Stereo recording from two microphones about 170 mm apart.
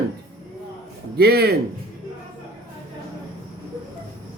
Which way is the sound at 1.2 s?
65° right (ahead or behind).